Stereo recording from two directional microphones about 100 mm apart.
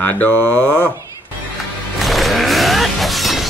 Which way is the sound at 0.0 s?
20° left (ahead or behind).